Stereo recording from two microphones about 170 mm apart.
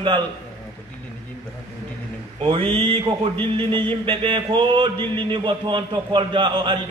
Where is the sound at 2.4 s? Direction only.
30° right (ahead or behind).